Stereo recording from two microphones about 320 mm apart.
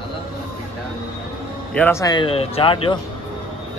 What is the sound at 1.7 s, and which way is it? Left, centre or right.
A man's voice, centre.